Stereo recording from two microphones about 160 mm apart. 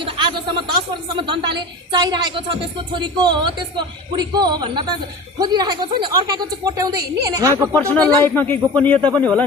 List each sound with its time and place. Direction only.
0.0 s a sound: 30° right (ahead or behind)
1.1 s speech: 30° right (ahead or behind)
8.2 s speech: 10° left (ahead or behind)